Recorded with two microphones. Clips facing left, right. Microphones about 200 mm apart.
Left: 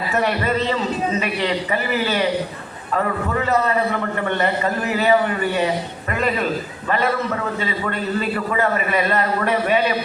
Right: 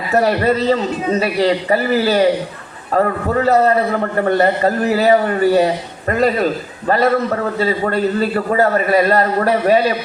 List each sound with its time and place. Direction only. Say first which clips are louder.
0.1 s a man's voice: right 7 dB; 35° right (ahead or behind)